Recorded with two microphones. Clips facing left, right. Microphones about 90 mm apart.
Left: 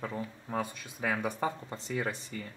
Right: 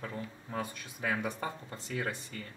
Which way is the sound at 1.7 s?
20° left (ahead or behind).